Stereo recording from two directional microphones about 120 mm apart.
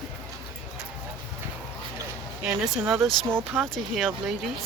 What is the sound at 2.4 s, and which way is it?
Speech, 5° right (ahead or behind).